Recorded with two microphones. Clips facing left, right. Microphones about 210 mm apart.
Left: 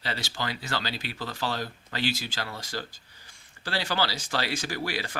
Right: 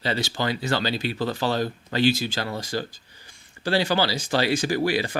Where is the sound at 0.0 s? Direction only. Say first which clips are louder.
Right 8 dB; 25° right (ahead or behind).